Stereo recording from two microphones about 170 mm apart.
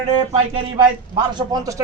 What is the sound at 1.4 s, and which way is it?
Speech, 20° right (ahead or behind).